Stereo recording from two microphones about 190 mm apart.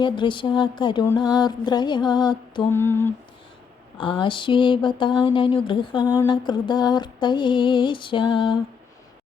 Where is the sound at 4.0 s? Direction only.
25° left (ahead or behind).